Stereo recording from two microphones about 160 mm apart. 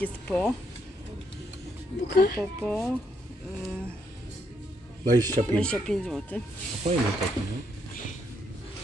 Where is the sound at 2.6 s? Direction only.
5° left (ahead or behind).